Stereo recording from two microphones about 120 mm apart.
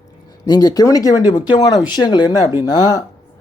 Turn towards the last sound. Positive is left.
turn(degrees=35)  # may be behind; listen again after turning